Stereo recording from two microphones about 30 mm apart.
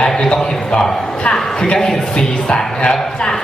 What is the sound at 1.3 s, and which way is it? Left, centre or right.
A man's voice, left.